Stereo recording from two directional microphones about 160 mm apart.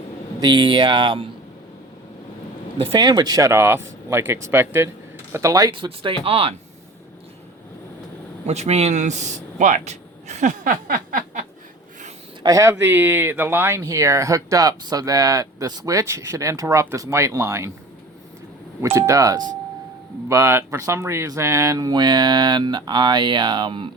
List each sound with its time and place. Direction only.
0.3 s speech: 30° right (ahead or behind)
2.7 s speech: 30° right (ahead or behind)
8.4 s speech: 45° right (ahead or behind)
12.4 s speech: 20° right (ahead or behind)
18.8 s speech: 20° right (ahead or behind)